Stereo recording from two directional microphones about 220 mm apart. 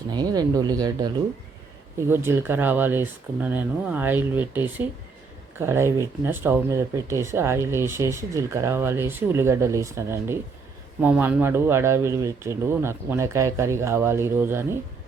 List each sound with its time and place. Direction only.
0.1 s speech: 20° right (ahead or behind)